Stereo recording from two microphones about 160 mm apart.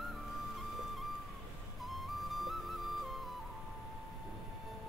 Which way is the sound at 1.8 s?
Centre (ahead or behind).